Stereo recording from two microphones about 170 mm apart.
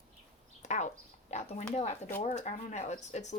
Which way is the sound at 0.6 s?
45° left (ahead or behind).